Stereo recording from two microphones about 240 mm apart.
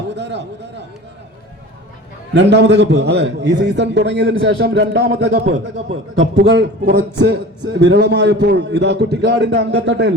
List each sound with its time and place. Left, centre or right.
0.1 s speech: right
2.3 s a man's voice: right